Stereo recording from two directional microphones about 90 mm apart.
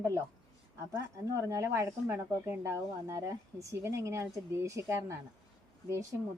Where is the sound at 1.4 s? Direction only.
30° right (ahead or behind).